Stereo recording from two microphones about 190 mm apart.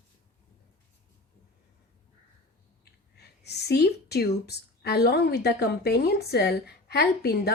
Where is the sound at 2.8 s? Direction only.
60° left (ahead or behind).